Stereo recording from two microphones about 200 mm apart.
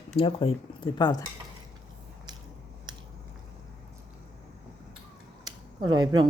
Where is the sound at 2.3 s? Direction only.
20° right (ahead or behind).